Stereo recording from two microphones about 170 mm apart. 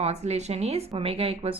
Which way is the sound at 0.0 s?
40° right (ahead or behind).